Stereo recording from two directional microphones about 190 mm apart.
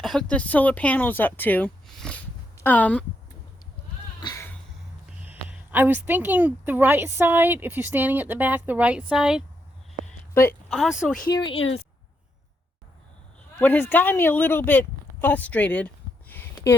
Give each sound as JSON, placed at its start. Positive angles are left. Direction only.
{"t": 0.0, "sound": "speech", "side_deg": 0}
{"t": 4.2, "sound": "music", "side_deg": 20}
{"t": 5.2, "sound": "a woman's voice", "side_deg": -10}
{"t": 10.7, "sound": "speech", "side_deg": 0}
{"t": 11.3, "sound": "speech", "side_deg": 25}
{"t": 13.6, "sound": "speech", "side_deg": 10}
{"t": 16.3, "sound": "a sound", "side_deg": 10}